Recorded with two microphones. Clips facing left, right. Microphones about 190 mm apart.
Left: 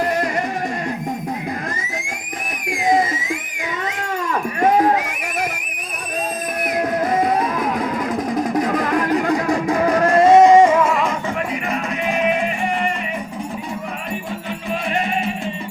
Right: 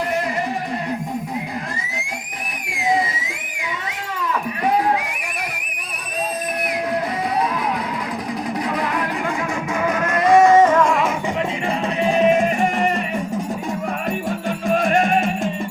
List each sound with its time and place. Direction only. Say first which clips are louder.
2.6 s a sound: left 3 dB; 45° left (ahead or behind)
7.1 s music: left 4 dB; 50° left (ahead or behind); by 11.1 s 5° left (ahead or behind)
11.7 s music: right 5 dB; 35° right (ahead or behind)
14.7 s music: right 5 dB; 45° right (ahead or behind)